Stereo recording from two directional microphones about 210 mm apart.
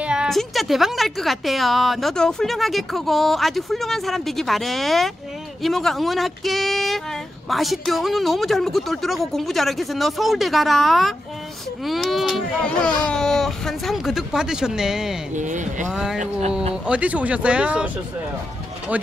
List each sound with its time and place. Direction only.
0.0 s speech: 5° right (ahead or behind)
15.3 s speech: 35° right (ahead or behind)
15.9 s speech: centre (ahead or behind)
16.2 s speech: 30° right (ahead or behind)
16.8 s speech: 5° right (ahead or behind)